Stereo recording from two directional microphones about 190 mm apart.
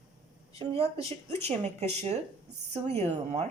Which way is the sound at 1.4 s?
35° right (ahead or behind).